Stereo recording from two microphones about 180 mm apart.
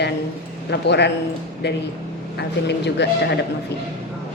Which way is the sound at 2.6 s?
70° left (ahead or behind).